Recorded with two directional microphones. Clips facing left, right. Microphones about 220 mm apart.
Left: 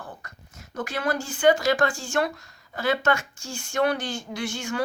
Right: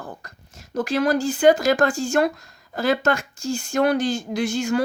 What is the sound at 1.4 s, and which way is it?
Speech, 40° right (ahead or behind).